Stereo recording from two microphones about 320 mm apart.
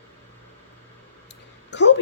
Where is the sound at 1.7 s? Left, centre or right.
Left.